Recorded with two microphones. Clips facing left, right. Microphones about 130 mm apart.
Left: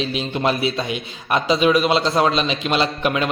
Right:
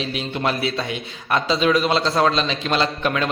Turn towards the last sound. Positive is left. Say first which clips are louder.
# left 1 dB
turn(degrees=15)  # may be behind; listen again after turning